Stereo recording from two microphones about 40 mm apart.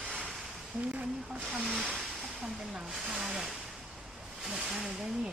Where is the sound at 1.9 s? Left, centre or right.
Centre.